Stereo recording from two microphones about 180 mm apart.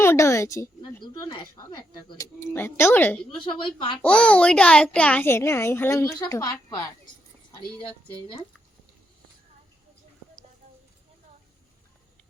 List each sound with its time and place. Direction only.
0.0 s a child's voice: 15° left (ahead or behind)
3.3 s a woman's voice: 25° left (ahead or behind)
4.0 s a child's voice: 5° left (ahead or behind)